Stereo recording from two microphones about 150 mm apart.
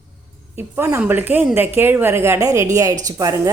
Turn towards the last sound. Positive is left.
turn(degrees=-25)  # may be behind; listen again after turning